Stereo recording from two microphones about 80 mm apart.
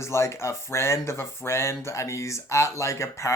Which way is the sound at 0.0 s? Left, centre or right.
Left.